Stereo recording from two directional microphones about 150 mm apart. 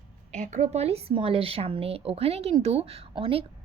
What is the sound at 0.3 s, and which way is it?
A woman's voice, 50° right (ahead or behind).